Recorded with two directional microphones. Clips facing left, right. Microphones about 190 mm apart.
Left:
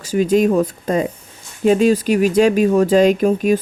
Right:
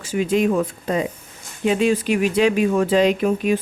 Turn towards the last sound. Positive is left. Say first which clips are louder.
# left 4 dB
turn(degrees=40)  # may be behind; listen again after turning